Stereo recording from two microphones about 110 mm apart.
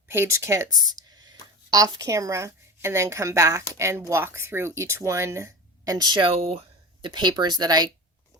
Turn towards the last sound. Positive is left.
turn(degrees=-40)  # may be behind; listen again after turning